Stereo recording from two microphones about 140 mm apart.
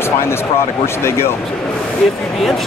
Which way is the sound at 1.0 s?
15° left (ahead or behind).